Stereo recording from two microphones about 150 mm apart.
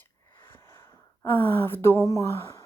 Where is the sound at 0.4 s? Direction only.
15° left (ahead or behind).